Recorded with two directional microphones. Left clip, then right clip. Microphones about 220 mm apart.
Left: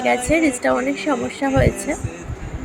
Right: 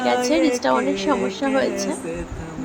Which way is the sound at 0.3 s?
5° right (ahead or behind).